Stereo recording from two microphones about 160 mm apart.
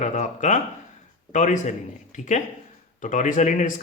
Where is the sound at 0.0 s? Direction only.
50° left (ahead or behind).